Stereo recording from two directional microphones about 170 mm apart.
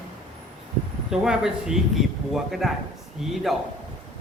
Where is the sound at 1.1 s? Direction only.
5° right (ahead or behind).